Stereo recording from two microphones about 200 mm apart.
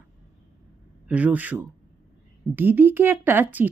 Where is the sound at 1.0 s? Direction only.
5° right (ahead or behind).